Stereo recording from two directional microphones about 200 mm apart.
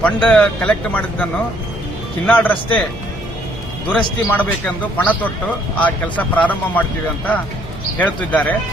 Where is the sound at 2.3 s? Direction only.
10° left (ahead or behind).